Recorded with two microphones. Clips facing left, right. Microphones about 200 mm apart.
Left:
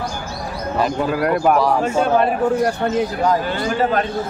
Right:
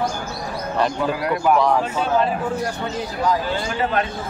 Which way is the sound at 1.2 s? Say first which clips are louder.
Left 2 dB; 50° left (ahead or behind).